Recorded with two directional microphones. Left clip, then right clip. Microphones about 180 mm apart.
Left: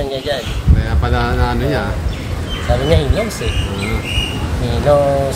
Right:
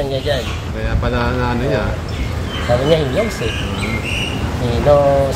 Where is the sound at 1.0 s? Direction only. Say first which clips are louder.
Even; 70° left (ahead or behind).